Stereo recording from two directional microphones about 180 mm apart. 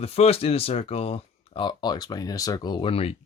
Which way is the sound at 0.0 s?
35° left (ahead or behind).